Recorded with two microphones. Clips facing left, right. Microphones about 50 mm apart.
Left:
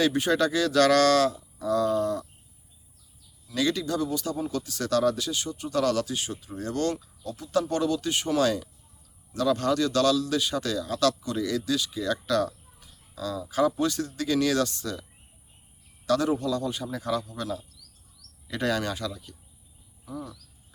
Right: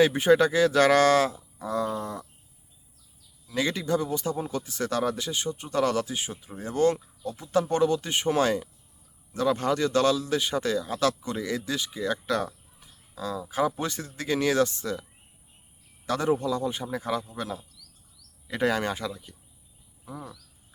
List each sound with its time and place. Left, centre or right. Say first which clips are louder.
0.0 s a man's voice: right 4 dB; right
3.5 s a man's voice: even; right
16.0 s a man's voice: left 1 dB; right
20.1 s a sound: left 2 dB; right